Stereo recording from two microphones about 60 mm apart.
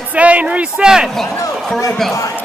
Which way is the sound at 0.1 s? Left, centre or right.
Right.